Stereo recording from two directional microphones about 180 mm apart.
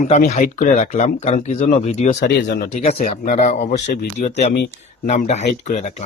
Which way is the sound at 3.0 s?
50° left (ahead or behind).